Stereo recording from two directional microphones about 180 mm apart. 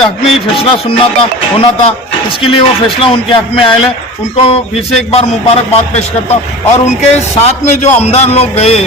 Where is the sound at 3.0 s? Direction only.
30° left (ahead or behind).